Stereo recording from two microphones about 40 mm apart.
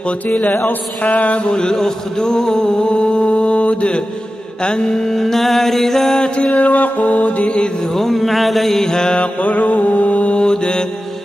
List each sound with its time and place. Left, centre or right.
0.5 s music: left
1.5 s music: left
5.0 s mantra: centre
6.5 s music: left
7.9 s a sound: centre
8.8 s music: centre
9.4 s mantra: left
10.4 s mantra: centre